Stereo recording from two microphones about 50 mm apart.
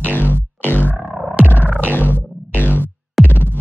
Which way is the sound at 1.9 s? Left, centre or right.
Left.